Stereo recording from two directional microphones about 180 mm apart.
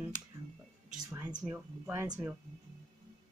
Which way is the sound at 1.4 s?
10° right (ahead or behind).